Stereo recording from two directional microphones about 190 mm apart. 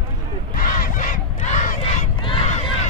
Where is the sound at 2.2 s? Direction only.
25° left (ahead or behind).